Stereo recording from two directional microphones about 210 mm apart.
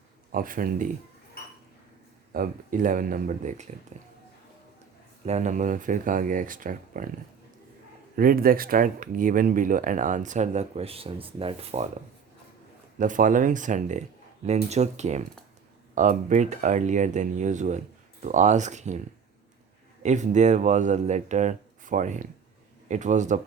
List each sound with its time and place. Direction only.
0.3 s speech: 40° right (ahead or behind)
2.3 s speech: 40° right (ahead or behind)
5.2 s speech: 35° right (ahead or behind)
8.1 s speech: 45° right (ahead or behind)